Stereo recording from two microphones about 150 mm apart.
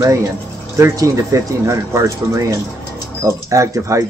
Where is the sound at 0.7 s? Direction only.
20° right (ahead or behind).